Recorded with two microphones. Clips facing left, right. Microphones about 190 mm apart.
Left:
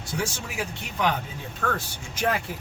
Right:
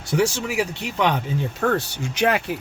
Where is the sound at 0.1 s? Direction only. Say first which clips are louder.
Right 10 dB; 75° right (ahead or behind).